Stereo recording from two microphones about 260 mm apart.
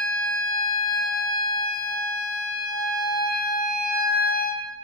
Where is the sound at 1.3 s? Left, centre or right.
Centre.